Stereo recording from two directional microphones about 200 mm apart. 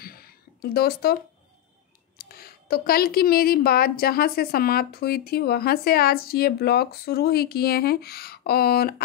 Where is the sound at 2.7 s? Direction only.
50° left (ahead or behind).